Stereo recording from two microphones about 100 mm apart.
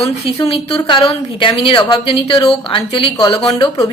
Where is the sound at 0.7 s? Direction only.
55° left (ahead or behind).